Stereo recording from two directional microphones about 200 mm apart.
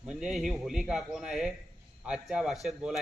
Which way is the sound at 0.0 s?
Centre (ahead or behind).